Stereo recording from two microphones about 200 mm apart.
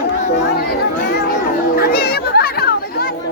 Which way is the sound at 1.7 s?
50° left (ahead or behind).